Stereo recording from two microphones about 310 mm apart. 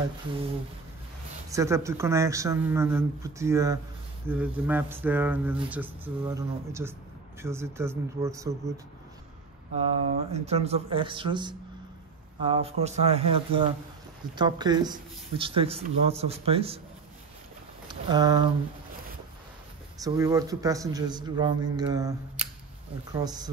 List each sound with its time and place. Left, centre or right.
1.5 s speech: centre
10.3 s speech: right
17.8 s speech: centre
20.0 s speech: centre